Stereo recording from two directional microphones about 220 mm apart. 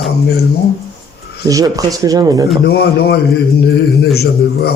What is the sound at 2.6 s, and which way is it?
Speech, 45° left (ahead or behind).